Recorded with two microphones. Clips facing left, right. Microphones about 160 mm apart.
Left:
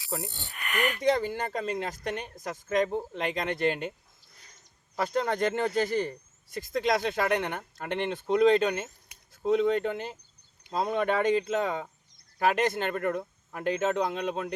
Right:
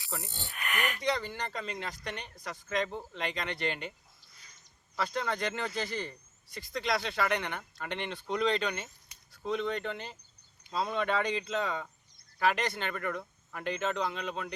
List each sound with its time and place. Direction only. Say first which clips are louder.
1.0 s speech: left 9 dB; 45° left (ahead or behind)
4.9 s speech: left 6 dB; 45° left (ahead or behind)